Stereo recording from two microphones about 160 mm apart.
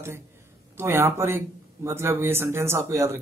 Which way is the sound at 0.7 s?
15° right (ahead or behind).